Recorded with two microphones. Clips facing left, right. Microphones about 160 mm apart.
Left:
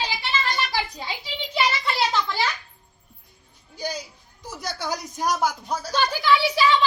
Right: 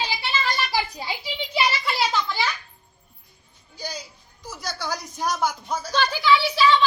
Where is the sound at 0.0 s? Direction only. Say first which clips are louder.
Even; 20° left (ahead or behind).